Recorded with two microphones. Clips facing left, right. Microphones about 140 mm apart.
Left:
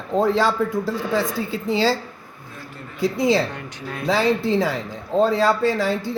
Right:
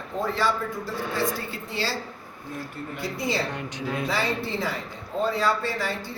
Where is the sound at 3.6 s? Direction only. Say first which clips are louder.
Right 2 dB; 20° right (ahead or behind).